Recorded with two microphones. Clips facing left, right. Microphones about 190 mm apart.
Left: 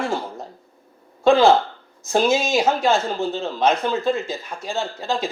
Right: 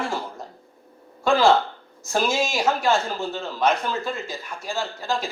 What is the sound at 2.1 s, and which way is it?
Speech, 25° left (ahead or behind).